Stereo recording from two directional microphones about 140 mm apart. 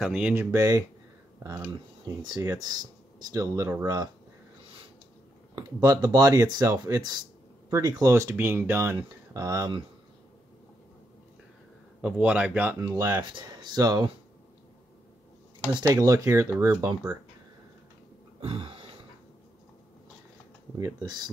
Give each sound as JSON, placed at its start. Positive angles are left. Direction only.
{"t": 0.0, "sound": "speech", "side_deg": -5}
{"t": 0.3, "sound": "speech", "side_deg": -20}
{"t": 5.6, "sound": "speech", "side_deg": -25}
{"t": 12.0, "sound": "a man's voice", "side_deg": -10}
{"t": 12.8, "sound": "speech", "side_deg": -25}
{"t": 15.8, "sound": "speech", "side_deg": -25}
{"t": 18.4, "sound": "a sound", "side_deg": -40}
{"t": 20.7, "sound": "speech", "side_deg": -25}